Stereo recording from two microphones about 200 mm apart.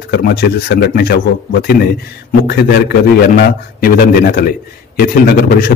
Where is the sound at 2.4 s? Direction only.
50° left (ahead or behind).